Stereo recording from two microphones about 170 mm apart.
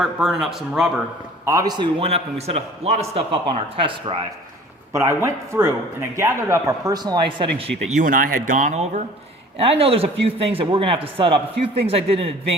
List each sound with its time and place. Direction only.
0.0 s speech: centre (ahead or behind)
1.5 s a man's voice: 20° right (ahead or behind)
4.9 s speech: 15° right (ahead or behind)
7.9 s speech: 50° right (ahead or behind)